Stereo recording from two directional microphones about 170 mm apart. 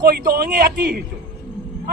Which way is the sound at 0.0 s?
60° right (ahead or behind).